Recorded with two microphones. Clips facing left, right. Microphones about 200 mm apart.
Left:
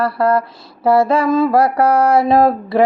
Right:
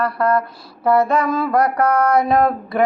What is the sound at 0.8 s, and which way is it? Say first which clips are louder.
Mantra: left 3 dB; 30° left (ahead or behind).